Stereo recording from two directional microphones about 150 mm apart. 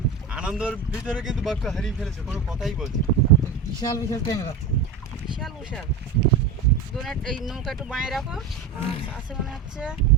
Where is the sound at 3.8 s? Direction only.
25° left (ahead or behind).